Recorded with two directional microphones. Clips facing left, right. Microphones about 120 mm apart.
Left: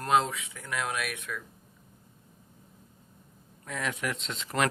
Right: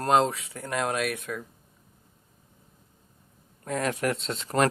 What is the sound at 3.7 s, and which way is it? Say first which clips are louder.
Speech: right 6 dB; 45° right (ahead or behind).